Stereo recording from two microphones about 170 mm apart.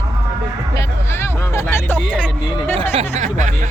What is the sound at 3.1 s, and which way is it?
Speech, 45° right (ahead or behind).